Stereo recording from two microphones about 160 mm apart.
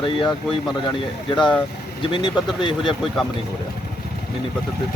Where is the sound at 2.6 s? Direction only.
30° left (ahead or behind).